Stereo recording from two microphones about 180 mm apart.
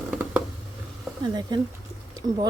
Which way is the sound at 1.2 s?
25° right (ahead or behind).